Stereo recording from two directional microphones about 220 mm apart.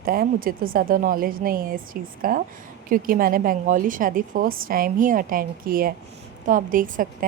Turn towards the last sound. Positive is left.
turn(degrees=-40)  # may be behind; listen again after turning